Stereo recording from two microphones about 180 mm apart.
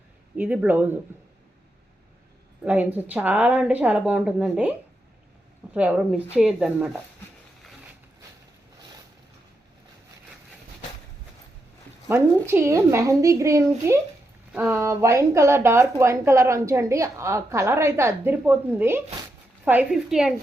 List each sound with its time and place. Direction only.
0.3 s speech: 5° right (ahead or behind)
2.6 s speech: 10° right (ahead or behind)
5.7 s speech: 5° right (ahead or behind)
12.0 s speech: 15° right (ahead or behind)